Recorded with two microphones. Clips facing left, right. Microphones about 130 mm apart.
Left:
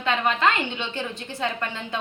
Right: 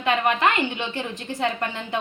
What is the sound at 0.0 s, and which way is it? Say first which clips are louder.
A woman's voice: right 1 dB; 15° right (ahead or behind).